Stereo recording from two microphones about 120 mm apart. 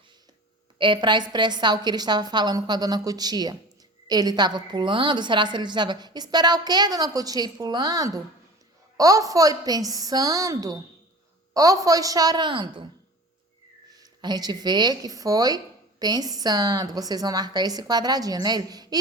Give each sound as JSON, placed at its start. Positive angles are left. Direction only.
{"t": 0.8, "sound": "a woman's voice", "side_deg": -40}
{"t": 13.9, "sound": "speech", "side_deg": -35}